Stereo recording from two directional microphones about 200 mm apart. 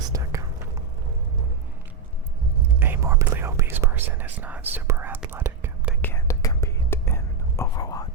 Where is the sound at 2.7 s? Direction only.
10° right (ahead or behind).